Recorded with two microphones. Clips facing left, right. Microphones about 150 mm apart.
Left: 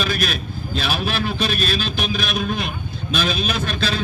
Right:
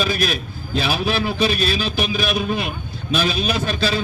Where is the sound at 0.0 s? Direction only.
5° right (ahead or behind).